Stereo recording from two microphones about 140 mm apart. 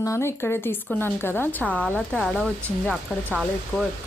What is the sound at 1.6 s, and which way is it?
Speech, centre (ahead or behind).